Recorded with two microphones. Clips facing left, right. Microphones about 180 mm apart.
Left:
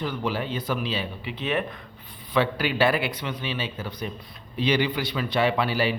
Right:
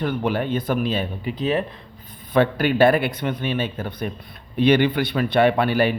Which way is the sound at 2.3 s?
50° right (ahead or behind).